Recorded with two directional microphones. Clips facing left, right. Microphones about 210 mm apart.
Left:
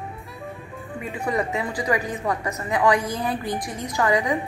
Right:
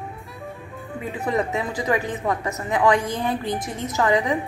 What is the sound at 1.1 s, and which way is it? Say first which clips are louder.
Speech: right 1 dB; centre (ahead or behind).